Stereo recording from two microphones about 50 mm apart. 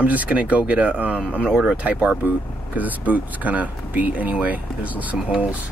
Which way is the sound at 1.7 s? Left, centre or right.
Right.